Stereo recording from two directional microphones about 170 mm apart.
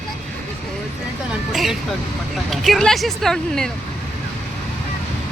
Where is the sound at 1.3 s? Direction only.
Centre (ahead or behind).